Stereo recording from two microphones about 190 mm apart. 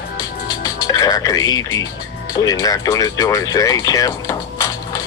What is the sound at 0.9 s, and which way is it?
Speech, 20° left (ahead or behind).